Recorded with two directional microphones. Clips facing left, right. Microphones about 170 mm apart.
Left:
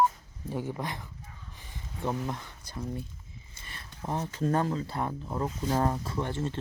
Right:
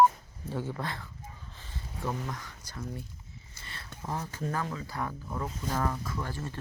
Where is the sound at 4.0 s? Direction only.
20° left (ahead or behind).